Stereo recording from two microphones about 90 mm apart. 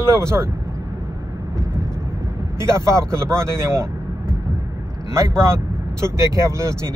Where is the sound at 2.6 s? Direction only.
30° right (ahead or behind).